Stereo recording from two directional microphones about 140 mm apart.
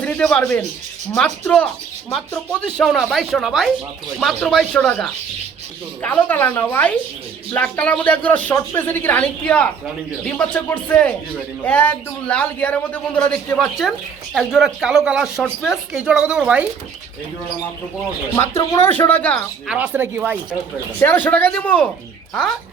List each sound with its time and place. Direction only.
0.0 s speech: 5° left (ahead or behind)
18.3 s speech: 20° left (ahead or behind)
19.6 s speech: 10° right (ahead or behind)
21.0 s speech: 15° left (ahead or behind)